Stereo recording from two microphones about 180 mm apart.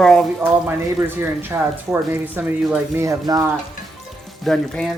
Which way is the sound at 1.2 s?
15° right (ahead or behind).